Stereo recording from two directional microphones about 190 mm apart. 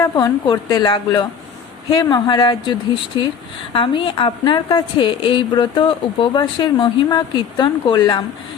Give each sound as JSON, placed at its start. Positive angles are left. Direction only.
{"t": 0.0, "sound": "a woman's voice", "side_deg": 20}